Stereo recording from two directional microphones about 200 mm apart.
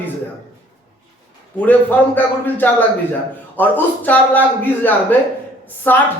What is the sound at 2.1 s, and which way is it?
A man's voice, 10° left (ahead or behind).